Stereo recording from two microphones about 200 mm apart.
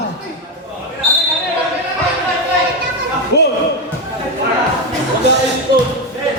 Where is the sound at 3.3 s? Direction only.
55° left (ahead or behind).